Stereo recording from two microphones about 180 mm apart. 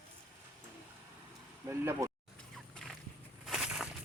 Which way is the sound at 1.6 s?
15° right (ahead or behind).